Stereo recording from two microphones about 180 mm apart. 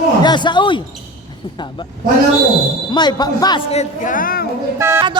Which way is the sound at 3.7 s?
40° left (ahead or behind).